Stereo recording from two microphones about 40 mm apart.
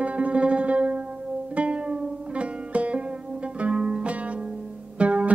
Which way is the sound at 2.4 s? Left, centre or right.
Right.